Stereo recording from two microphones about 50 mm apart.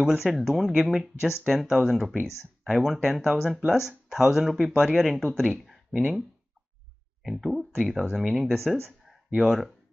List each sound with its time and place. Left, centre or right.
0.0 s speech: centre
5.7 s speech: centre
7.2 s speech: centre